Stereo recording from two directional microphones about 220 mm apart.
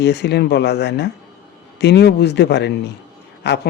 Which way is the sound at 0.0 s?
50° left (ahead or behind).